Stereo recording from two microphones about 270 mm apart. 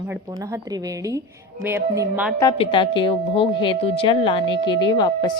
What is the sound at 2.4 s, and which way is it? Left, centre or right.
A woman's voice, centre.